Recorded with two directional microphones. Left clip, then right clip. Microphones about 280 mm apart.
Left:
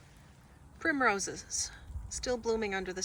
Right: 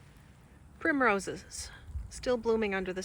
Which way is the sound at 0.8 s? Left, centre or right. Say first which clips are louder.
Right 2 dB; centre.